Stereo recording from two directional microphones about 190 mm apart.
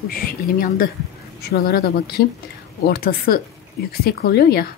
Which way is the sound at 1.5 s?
55° left (ahead or behind).